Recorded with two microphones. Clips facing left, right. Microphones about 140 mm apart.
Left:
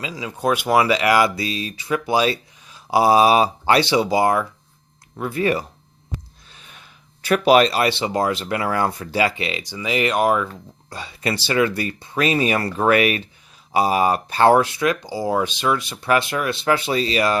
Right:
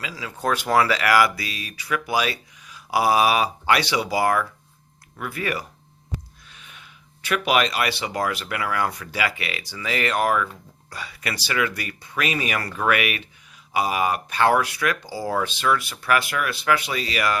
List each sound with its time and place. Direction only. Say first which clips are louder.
0.0 s speech: left 4 dB; 20° left (ahead or behind)